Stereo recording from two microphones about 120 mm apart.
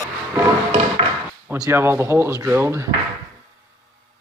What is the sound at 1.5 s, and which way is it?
Speech, 15° right (ahead or behind).